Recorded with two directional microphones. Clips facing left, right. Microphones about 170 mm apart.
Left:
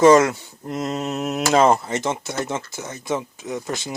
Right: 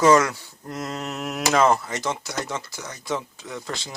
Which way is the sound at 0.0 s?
25° left (ahead or behind).